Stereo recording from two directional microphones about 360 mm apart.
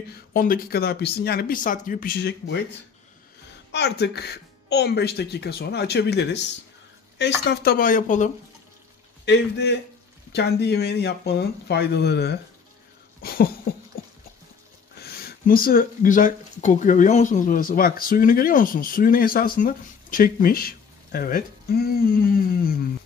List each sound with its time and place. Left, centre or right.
0.1 s speech: left
3.7 s speech: left
14.0 s a sound: left
15.0 s speech: left